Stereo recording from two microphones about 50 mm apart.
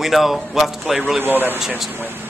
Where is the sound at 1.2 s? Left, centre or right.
Right.